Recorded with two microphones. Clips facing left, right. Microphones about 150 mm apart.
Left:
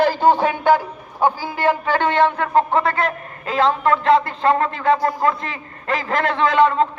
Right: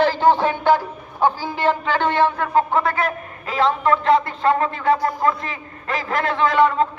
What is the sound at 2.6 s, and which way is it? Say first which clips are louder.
A man's voice: left 1 dB; 5° right (ahead or behind).